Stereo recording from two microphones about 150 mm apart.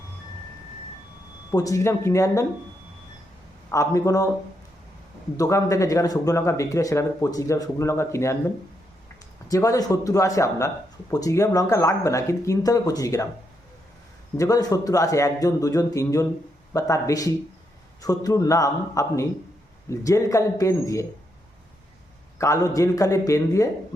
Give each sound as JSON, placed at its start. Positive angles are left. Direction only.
{"t": 1.5, "sound": "speech", "side_deg": 25}
{"t": 3.7, "sound": "speech", "side_deg": 20}
{"t": 5.4, "sound": "speech", "side_deg": 20}
{"t": 14.3, "sound": "speech", "side_deg": 25}
{"t": 22.4, "sound": "speech", "side_deg": 20}